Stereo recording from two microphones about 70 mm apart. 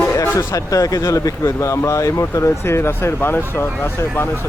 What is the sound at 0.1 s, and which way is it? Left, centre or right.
Speech, left.